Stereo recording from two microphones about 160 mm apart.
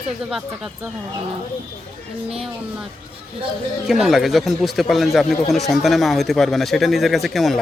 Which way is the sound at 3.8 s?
Centre (ahead or behind).